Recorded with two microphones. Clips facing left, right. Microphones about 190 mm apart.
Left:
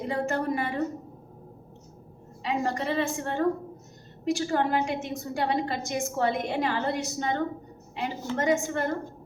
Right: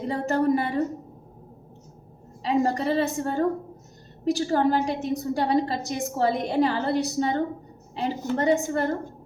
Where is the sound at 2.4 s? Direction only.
35° right (ahead or behind).